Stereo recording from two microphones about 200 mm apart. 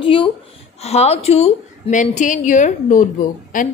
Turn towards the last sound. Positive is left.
turn(degrees=40)  # may be behind; listen again after turning